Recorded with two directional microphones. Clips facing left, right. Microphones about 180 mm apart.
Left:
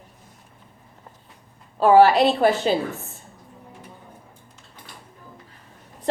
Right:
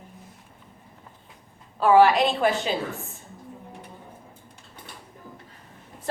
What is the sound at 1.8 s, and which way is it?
Speech, 35° left (ahead or behind).